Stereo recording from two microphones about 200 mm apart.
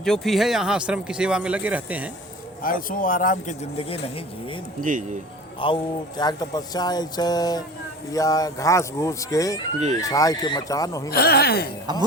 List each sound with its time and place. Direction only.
0.0 s speech: centre (ahead or behind)
2.6 s speech: 45° left (ahead or behind); by 4.0 s 30° left (ahead or behind)
4.8 s speech: 40° right (ahead or behind)
5.5 s speech: 25° left (ahead or behind)
11.1 s speech: 50° left (ahead or behind)